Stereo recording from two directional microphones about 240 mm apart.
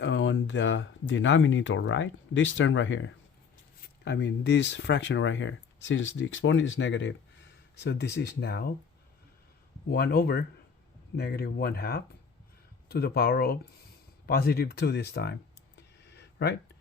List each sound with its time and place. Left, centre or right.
0.0 s speech: left
9.9 s speech: left
16.0 s a sound: left